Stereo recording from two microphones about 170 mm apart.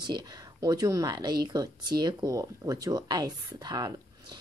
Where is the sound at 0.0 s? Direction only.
25° right (ahead or behind).